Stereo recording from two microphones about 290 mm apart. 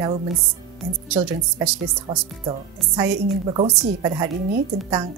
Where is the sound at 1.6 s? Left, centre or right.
Centre.